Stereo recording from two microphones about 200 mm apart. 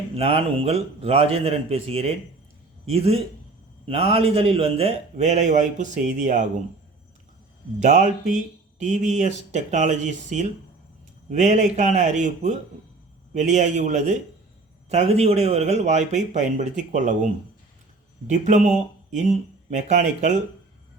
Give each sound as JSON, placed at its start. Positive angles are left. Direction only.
{"t": 0.2, "sound": "a man's voice", "side_deg": -30}
{"t": 7.8, "sound": "a man's voice", "side_deg": -35}
{"t": 18.3, "sound": "a man's voice", "side_deg": -40}